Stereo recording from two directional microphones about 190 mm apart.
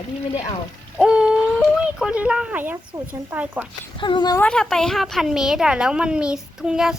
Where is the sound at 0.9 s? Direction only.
5° right (ahead or behind).